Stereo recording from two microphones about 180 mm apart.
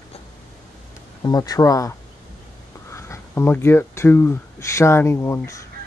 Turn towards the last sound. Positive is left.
turn(degrees=15)  # may be behind; listen again after turning